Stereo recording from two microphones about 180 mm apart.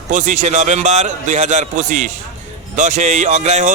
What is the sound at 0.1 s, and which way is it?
Speech, 45° right (ahead or behind).